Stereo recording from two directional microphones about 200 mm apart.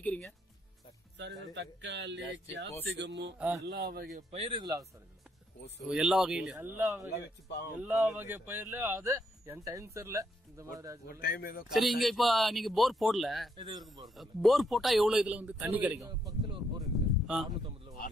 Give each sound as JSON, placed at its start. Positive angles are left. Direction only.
{"t": 0.0, "sound": "music", "side_deg": 5}
{"t": 1.5, "sound": "speech", "side_deg": -60}
{"t": 3.3, "sound": "speech", "side_deg": -10}
{"t": 3.6, "sound": "speech", "side_deg": -55}
{"t": 4.3, "sound": "speech", "side_deg": -30}
{"t": 5.9, "sound": "a man's voice", "side_deg": 0}
{"t": 6.8, "sound": "speech", "side_deg": -15}
{"t": 11.1, "sound": "speech", "side_deg": 45}
{"t": 11.7, "sound": "a man's voice", "side_deg": 0}
{"t": 13.6, "sound": "speech", "side_deg": -20}
{"t": 14.1, "sound": "a man's voice", "side_deg": 0}
{"t": 16.1, "sound": "speech", "side_deg": -25}
{"t": 17.3, "sound": "a man's voice", "side_deg": -5}